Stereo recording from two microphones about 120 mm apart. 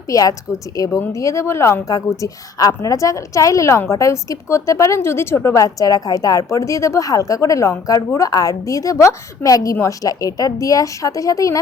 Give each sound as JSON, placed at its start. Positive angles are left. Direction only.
{"t": 0.1, "sound": "a woman's voice", "side_deg": 30}